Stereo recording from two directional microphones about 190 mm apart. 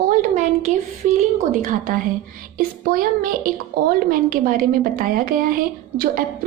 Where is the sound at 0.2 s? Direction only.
40° right (ahead or behind).